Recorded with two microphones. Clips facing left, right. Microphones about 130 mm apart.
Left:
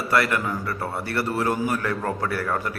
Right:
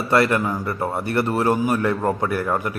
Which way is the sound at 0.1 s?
25° right (ahead or behind).